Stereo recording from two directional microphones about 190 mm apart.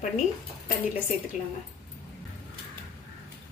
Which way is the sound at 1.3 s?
40° left (ahead or behind).